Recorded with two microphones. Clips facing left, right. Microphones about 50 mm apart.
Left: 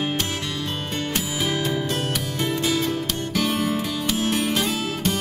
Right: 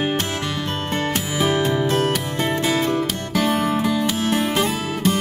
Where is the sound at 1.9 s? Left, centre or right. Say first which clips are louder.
Right 7 dB; right.